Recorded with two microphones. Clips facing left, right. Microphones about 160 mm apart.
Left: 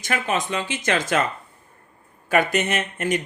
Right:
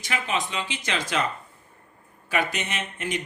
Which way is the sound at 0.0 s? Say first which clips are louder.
Left 4 dB; 45° left (ahead or behind).